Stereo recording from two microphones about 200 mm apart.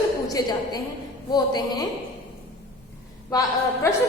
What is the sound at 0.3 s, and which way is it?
A woman's voice, 20° left (ahead or behind).